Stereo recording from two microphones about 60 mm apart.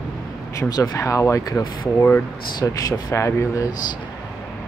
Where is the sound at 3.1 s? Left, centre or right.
Left.